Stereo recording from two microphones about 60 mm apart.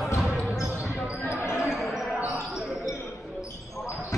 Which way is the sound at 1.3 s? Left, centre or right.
Left.